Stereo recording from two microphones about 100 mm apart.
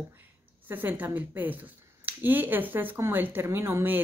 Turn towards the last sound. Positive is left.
turn(degrees=-25)  # may be behind; listen again after turning